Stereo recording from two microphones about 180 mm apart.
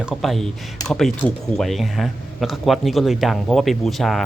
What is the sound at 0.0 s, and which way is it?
A man's voice, centre (ahead or behind).